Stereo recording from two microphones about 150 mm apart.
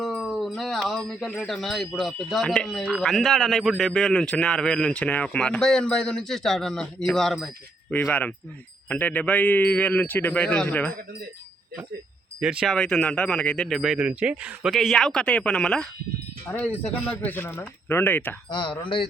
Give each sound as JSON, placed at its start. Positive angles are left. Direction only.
{"t": 0.0, "sound": "a sound", "side_deg": 0}
{"t": 2.0, "sound": "speech", "side_deg": 0}
{"t": 8.0, "sound": "a man's voice", "side_deg": 10}
{"t": 12.4, "sound": "speech", "side_deg": -5}
{"t": 12.7, "sound": "a man's voice", "side_deg": 5}
{"t": 18.5, "sound": "speech", "side_deg": 35}